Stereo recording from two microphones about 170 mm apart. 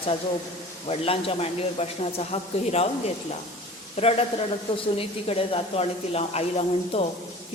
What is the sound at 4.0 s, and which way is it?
A woman's voice, 35° left (ahead or behind).